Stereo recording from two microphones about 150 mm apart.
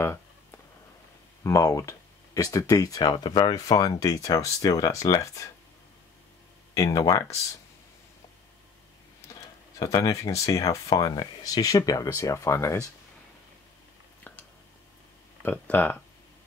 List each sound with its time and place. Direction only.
1.4 s speech: 20° left (ahead or behind)
6.7 s speech: 25° left (ahead or behind)
9.8 s speech: 25° left (ahead or behind)
15.4 s speech: 10° left (ahead or behind)